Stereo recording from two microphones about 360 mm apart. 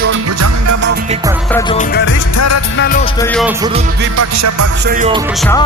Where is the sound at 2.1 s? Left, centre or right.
Left.